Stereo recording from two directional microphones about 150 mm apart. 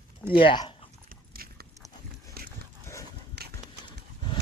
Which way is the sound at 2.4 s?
90° right.